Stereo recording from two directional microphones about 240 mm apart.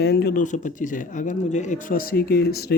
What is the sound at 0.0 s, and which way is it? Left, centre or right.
Speech, left.